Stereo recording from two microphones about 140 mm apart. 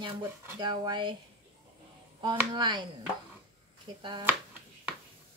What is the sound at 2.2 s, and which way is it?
Speech, 35° right (ahead or behind).